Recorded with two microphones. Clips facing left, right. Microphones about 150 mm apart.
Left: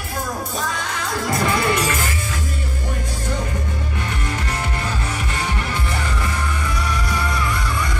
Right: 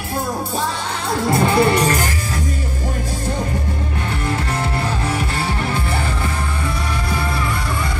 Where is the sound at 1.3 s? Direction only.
30° right (ahead or behind).